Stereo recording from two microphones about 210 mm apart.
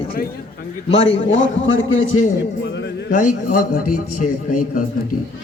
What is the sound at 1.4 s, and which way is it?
Speech, 65° left (ahead or behind).